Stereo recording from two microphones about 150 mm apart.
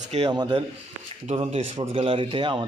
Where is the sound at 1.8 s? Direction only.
35° right (ahead or behind).